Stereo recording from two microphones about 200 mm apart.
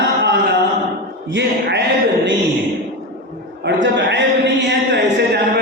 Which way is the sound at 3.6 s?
60° right (ahead or behind).